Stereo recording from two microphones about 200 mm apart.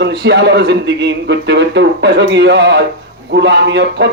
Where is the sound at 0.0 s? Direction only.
60° right (ahead or behind).